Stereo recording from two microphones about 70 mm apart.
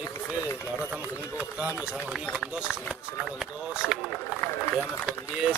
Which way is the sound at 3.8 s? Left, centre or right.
Centre.